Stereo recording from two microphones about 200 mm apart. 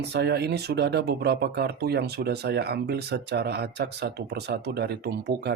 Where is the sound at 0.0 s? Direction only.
55° right (ahead or behind).